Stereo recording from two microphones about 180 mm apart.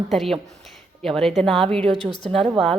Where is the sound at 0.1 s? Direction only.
Centre (ahead or behind).